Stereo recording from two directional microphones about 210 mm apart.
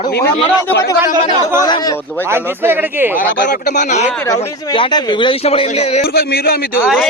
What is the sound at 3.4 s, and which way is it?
Speech, 40° left (ahead or behind).